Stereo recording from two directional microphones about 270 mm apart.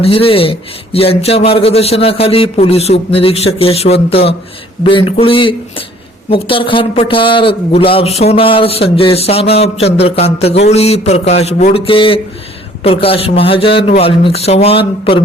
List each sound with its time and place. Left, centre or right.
0.0 s speech: centre